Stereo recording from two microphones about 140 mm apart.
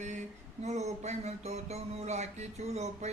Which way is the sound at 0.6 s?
50° right (ahead or behind).